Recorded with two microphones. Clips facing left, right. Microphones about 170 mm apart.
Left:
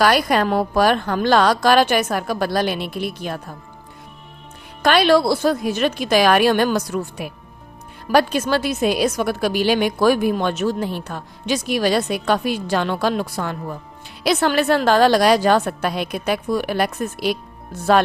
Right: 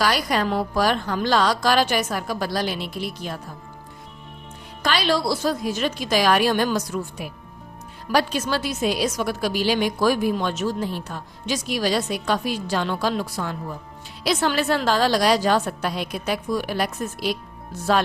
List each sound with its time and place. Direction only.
0.0 s a woman's voice: 60° left (ahead or behind)
4.8 s a woman's voice: 55° left (ahead or behind)